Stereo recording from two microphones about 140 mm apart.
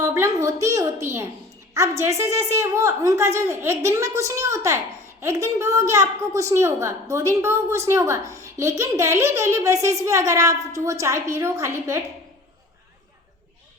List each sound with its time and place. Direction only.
0.0 s a woman's voice: 20° right (ahead or behind)